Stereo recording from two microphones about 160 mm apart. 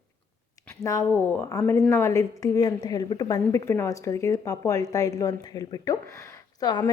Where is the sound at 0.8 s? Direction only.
20° left (ahead or behind).